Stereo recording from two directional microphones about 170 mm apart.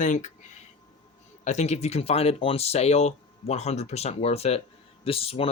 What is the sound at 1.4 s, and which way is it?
Speech, 40° left (ahead or behind).